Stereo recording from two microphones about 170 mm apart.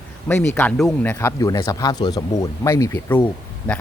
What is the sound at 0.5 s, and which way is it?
Speech, 5° left (ahead or behind).